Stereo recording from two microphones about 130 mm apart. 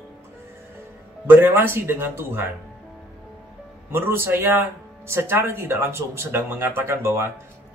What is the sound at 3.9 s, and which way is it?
Speech, 20° right (ahead or behind).